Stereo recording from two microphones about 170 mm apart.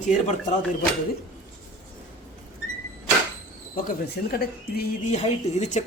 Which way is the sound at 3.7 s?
60° left (ahead or behind).